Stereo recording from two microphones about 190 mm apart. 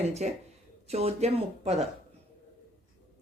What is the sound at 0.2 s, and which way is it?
Speech, 40° right (ahead or behind).